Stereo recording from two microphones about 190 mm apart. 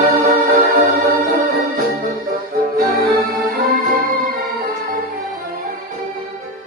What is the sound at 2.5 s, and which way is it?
Music, 55° right (ahead or behind).